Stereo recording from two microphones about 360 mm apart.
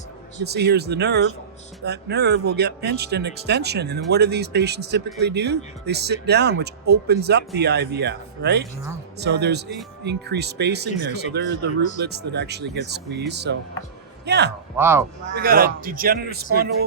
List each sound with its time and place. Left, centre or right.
0.4 s speech: right
14.8 s speech: centre
15.4 s speech: right